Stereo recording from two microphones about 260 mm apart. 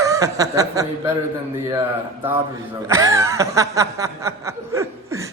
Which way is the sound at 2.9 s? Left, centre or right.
Centre.